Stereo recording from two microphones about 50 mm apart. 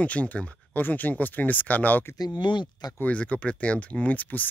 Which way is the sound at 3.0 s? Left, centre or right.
Left.